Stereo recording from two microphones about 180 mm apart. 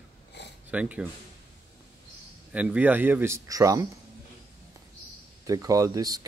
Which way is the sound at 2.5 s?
10° right (ahead or behind).